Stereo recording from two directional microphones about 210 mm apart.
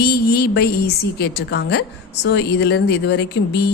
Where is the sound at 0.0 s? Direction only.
45° left (ahead or behind).